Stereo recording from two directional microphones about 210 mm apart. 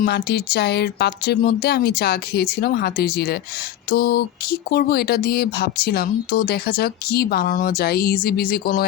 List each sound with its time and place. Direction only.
0.0 s speech: 50° left (ahead or behind)